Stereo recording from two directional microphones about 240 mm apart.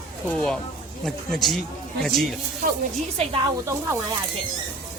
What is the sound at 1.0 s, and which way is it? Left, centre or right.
Speech, centre.